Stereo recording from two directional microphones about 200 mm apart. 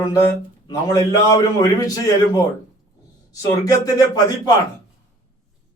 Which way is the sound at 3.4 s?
20° left (ahead or behind).